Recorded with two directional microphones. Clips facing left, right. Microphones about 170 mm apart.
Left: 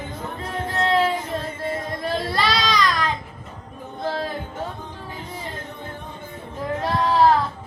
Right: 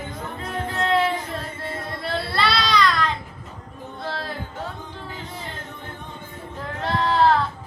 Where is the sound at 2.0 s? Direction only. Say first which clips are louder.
Even; 15° left (ahead or behind).